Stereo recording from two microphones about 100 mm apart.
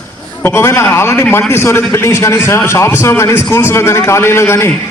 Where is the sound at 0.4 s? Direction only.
25° left (ahead or behind).